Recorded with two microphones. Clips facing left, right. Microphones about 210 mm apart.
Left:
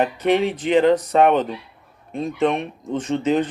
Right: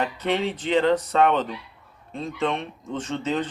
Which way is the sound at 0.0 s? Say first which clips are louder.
Left 6 dB; 15° left (ahead or behind).